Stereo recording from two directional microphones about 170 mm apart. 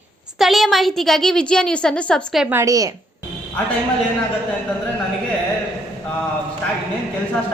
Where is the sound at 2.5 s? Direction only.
20° right (ahead or behind).